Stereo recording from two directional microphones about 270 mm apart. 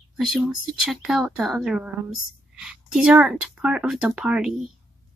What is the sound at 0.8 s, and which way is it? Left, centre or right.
Speech, centre.